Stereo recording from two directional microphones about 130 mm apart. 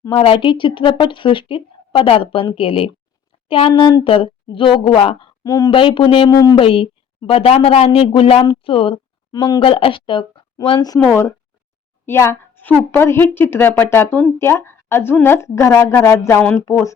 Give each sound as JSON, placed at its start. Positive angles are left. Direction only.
{"t": 0.1, "sound": "a woman's voice", "side_deg": 45}
{"t": 5.4, "sound": "speech", "side_deg": 30}
{"t": 5.7, "sound": "a woman's voice", "side_deg": 40}
{"t": 6.3, "sound": "a woman's voice", "side_deg": 25}
{"t": 6.6, "sound": "a woman's voice", "side_deg": 45}